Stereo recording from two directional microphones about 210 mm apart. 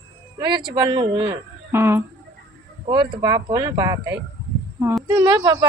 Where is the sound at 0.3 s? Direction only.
20° right (ahead or behind).